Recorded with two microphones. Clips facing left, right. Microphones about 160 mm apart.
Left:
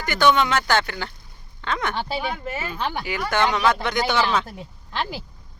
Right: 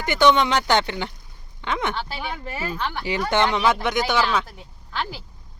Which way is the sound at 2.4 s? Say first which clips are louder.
Left 2 dB; centre (ahead or behind).